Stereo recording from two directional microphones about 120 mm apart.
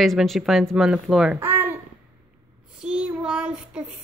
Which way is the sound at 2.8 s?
5° right (ahead or behind).